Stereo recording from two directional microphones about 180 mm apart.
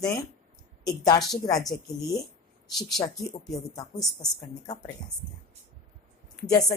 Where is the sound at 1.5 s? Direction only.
20° left (ahead or behind).